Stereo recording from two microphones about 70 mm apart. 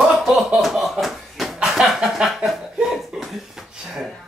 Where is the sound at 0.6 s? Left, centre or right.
Centre.